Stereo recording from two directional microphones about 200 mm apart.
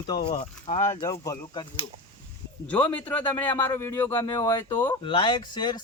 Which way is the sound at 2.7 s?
5° left (ahead or behind).